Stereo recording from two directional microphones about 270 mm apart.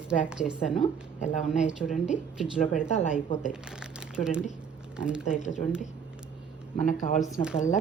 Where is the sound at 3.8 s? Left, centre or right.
Centre.